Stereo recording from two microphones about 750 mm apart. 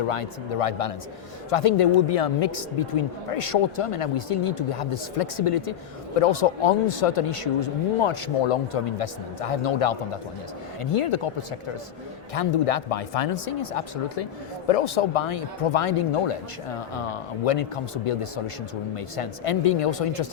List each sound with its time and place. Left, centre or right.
0.1 s speech: left